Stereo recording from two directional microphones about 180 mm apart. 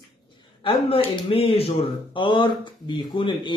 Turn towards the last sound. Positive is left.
turn(degrees=25)  # may be behind; listen again after turning